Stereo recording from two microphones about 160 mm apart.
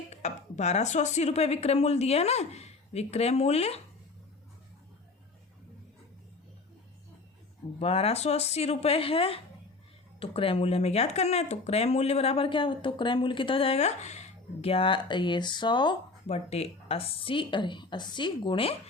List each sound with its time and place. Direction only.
0.1 s speech: 45° left (ahead or behind)
7.8 s speech: 35° left (ahead or behind)
16.2 s speech: 40° left (ahead or behind)